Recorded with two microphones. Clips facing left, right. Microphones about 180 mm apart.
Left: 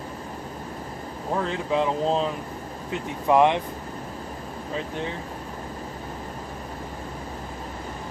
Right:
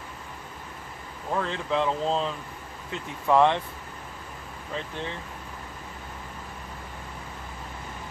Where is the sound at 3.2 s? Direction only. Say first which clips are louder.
Left 2 dB; 15° left (ahead or behind).